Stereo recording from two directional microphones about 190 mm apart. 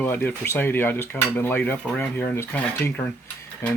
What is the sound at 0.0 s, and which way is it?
Cutlery, 10° left (ahead or behind).